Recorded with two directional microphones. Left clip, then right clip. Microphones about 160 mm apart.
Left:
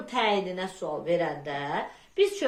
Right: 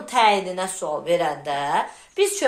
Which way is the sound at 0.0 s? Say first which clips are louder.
Right 8 dB; 35° left (ahead or behind).